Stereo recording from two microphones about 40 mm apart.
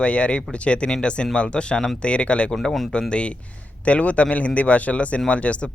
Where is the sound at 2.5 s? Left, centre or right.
Centre.